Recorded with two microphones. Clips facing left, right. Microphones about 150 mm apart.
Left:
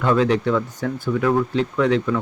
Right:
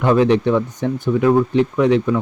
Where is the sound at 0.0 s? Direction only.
20° right (ahead or behind).